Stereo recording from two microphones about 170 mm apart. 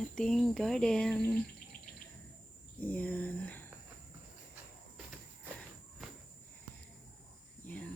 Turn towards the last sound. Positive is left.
turn(degrees=10)  # may be behind; listen again after turning